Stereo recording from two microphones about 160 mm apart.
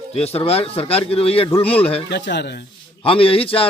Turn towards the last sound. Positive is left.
turn(degrees=35)  # may be behind; listen again after turning